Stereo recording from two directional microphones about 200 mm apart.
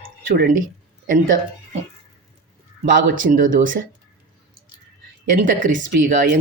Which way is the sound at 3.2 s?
40° right (ahead or behind).